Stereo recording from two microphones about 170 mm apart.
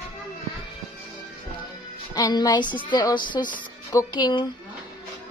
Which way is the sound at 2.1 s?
25° left (ahead or behind).